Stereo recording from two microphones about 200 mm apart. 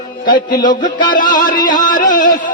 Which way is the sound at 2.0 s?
40° left (ahead or behind).